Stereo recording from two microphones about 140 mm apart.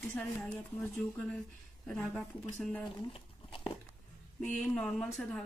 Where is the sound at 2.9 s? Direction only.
40° left (ahead or behind).